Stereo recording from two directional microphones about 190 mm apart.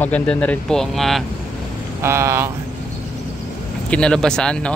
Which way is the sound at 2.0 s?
15° right (ahead or behind).